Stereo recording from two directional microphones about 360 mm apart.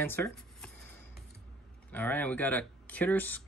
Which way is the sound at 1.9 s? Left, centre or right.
Centre.